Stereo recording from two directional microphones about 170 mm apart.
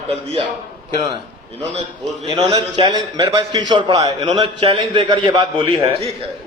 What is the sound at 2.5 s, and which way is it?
A man's voice, 25° right (ahead or behind).